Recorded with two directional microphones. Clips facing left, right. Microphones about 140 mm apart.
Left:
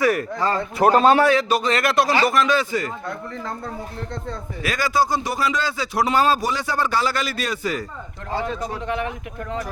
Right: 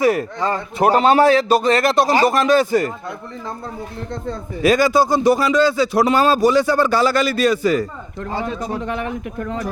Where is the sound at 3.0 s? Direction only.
15° right (ahead or behind).